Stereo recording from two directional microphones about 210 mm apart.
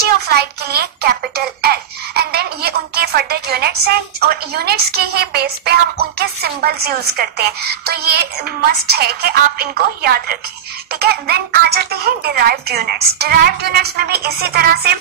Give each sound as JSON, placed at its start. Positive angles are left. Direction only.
{"t": 0.0, "sound": "a child's voice", "side_deg": -50}